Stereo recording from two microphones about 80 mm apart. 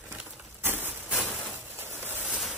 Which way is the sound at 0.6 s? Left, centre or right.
Right.